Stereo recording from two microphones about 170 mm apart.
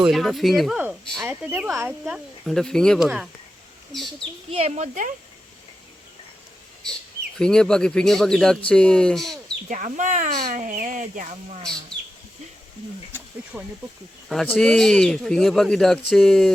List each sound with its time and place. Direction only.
0.0 s speech: centre (ahead or behind)
4.2 s speech: 35° right (ahead or behind)
7.3 s speech: 5° left (ahead or behind)
9.6 s speech: 50° right (ahead or behind)
13.1 s a sound: 10° right (ahead or behind)
14.3 s speech: centre (ahead or behind)